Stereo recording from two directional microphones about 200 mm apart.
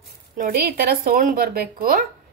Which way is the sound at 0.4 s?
50° right (ahead or behind).